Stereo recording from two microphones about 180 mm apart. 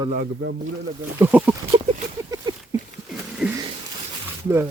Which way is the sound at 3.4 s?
5° right (ahead or behind).